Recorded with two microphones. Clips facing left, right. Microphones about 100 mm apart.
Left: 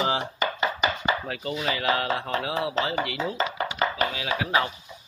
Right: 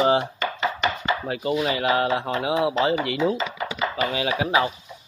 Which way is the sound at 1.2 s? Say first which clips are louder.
Right 5 dB; 25° right (ahead or behind).